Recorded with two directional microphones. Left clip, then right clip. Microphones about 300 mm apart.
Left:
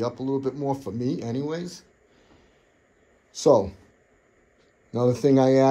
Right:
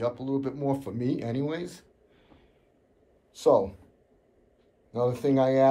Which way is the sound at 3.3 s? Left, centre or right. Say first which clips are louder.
Left 3 dB; left.